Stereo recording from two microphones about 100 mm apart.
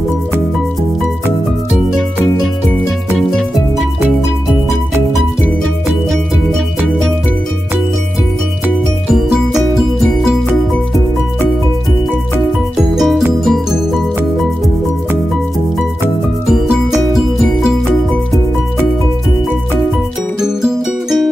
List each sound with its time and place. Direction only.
3.2 s music: 5° left (ahead or behind)
12.7 s music: centre (ahead or behind)
20.3 s music: 5° right (ahead or behind)